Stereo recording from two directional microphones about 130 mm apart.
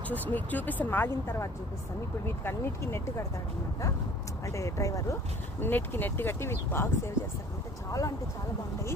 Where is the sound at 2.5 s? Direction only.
20° left (ahead or behind).